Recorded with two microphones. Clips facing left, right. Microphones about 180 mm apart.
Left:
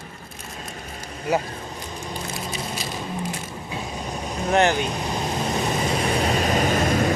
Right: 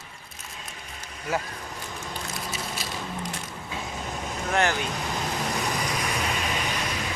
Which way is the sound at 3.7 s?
20° left (ahead or behind).